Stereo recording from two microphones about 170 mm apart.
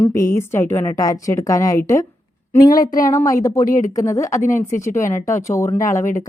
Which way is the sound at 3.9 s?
20° left (ahead or behind).